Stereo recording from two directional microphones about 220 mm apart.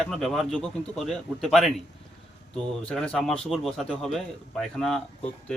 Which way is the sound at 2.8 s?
5° left (ahead or behind).